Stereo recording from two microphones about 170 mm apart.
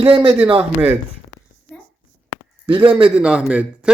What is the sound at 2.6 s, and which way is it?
Speech, 30° right (ahead or behind).